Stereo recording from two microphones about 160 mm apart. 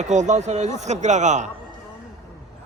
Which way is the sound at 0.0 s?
50° right (ahead or behind).